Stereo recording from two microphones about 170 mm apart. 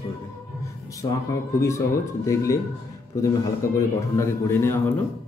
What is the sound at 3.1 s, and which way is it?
A man's voice, 20° left (ahead or behind).